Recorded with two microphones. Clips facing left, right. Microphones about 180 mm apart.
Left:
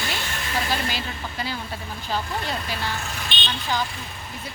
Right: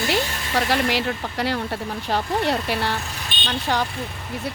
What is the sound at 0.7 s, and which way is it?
Speech, 75° right (ahead or behind).